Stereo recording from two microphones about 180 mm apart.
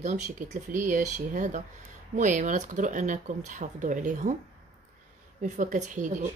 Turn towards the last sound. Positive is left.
turn(degrees=-40)  # may be behind; listen again after turning